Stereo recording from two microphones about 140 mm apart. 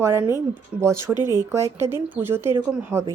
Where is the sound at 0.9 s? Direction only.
30° left (ahead or behind).